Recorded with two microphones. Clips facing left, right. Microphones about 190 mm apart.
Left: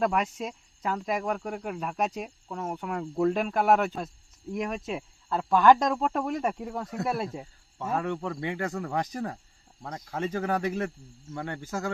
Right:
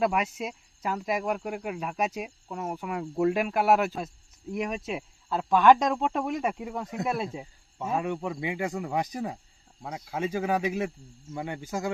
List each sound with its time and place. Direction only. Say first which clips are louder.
0.0 s speech: even; 5° right (ahead or behind)